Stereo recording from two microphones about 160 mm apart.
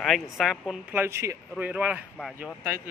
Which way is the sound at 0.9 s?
15° right (ahead or behind).